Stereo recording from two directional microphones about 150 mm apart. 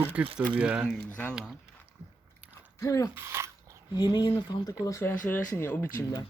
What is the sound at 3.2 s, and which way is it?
Speech, 20° right (ahead or behind).